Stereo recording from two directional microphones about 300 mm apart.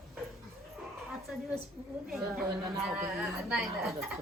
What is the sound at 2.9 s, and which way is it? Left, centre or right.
A woman's voice, centre.